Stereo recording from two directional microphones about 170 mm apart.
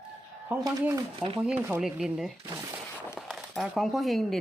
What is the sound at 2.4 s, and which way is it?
Speech, 20° right (ahead or behind).